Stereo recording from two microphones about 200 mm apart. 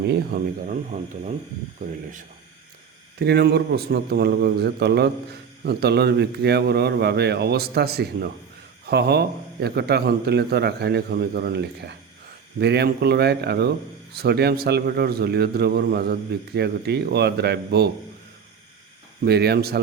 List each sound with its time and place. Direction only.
0.0 s a man's voice: 50° right (ahead or behind)
3.2 s a man's voice: 55° right (ahead or behind)
19.2 s a man's voice: 55° right (ahead or behind)